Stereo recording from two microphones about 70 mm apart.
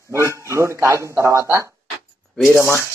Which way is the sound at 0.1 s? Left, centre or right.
Right.